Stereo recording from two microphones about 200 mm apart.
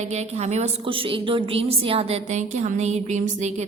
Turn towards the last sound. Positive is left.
turn(degrees=-35)  # may be behind; listen again after turning